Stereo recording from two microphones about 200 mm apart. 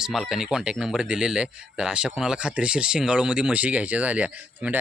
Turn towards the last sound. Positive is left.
turn(degrees=-5)  # may be behind; listen again after turning